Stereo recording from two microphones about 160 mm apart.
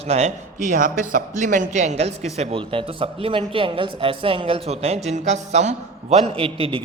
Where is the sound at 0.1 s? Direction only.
45° right (ahead or behind).